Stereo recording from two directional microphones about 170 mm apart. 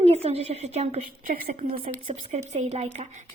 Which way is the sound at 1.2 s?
50° right (ahead or behind).